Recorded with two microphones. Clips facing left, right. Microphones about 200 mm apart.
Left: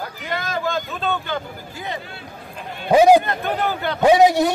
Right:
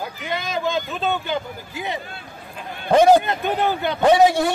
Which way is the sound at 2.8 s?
10° left (ahead or behind).